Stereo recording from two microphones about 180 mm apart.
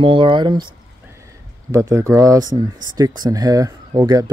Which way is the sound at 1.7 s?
15° right (ahead or behind).